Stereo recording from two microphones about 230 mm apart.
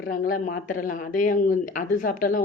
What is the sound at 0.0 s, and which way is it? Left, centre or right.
Speech, left.